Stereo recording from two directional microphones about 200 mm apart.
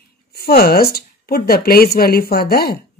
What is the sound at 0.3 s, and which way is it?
A woman's voice, 50° left (ahead or behind).